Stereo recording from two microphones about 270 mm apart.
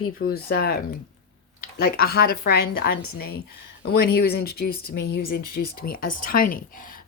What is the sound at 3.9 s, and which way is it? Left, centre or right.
Speech, left.